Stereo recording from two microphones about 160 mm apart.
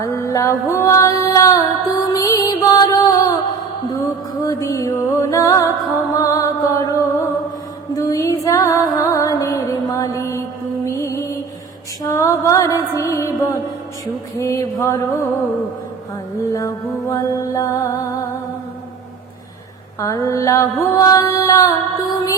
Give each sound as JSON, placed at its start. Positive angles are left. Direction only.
{"t": 0.0, "sound": "music", "side_deg": 20}
{"t": 7.9, "sound": "music", "side_deg": 20}
{"t": 14.3, "sound": "a sound", "side_deg": 20}
{"t": 16.5, "sound": "music", "side_deg": 20}
{"t": 20.0, "sound": "mantra", "side_deg": 20}